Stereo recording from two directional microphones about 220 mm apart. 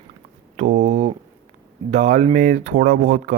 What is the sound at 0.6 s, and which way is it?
Speech, 35° right (ahead or behind).